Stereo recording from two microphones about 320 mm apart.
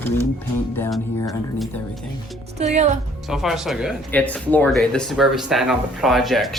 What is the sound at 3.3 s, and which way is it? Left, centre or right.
Speech, centre.